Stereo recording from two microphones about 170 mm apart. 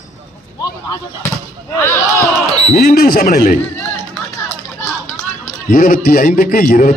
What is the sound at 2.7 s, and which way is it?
Speech, 60° left (ahead or behind).